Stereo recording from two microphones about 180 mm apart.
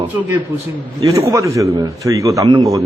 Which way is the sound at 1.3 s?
15° right (ahead or behind).